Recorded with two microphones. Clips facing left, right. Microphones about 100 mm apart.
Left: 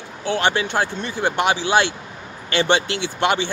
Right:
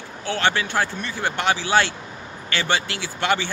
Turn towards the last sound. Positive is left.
turn(degrees=20)  # may be behind; listen again after turning